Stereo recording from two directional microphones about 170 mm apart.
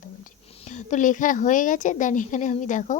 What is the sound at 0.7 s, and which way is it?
A woman's voice, 50° left (ahead or behind).